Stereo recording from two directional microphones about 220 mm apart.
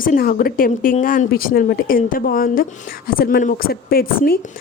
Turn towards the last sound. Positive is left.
turn(degrees=40)  # may be behind; listen again after turning